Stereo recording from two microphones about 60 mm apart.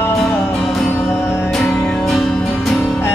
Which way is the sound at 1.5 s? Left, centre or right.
Centre.